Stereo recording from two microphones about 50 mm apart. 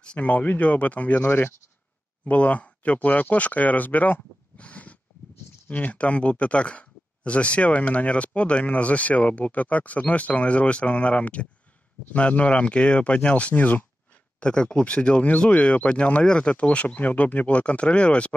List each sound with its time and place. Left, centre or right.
0.2 s speech: left
14.4 s speech: centre